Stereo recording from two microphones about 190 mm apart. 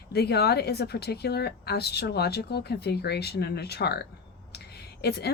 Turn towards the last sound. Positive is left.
turn(degrees=60)  # may be behind; listen again after turning